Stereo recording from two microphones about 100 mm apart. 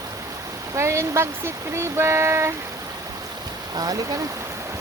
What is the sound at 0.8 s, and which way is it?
Speech, 30° right (ahead or behind).